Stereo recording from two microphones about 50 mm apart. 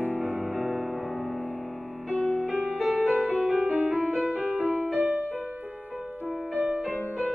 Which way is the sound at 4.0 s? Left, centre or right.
Centre.